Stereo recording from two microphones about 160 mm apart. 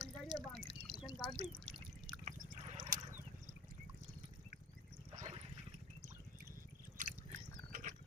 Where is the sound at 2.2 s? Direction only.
50° right (ahead or behind).